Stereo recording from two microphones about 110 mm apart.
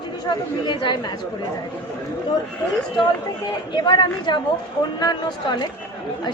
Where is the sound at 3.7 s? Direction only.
45° left (ahead or behind).